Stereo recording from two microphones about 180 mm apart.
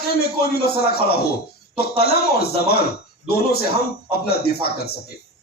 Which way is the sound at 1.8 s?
60° left (ahead or behind).